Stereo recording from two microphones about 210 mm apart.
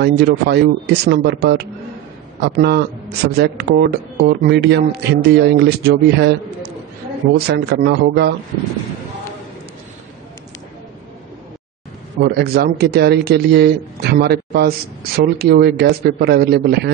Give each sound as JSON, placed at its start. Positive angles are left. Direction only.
{"t": 0.0, "sound": "speech", "side_deg": -50}
{"t": 7.3, "sound": "speech", "side_deg": -50}
{"t": 12.2, "sound": "speech", "side_deg": -50}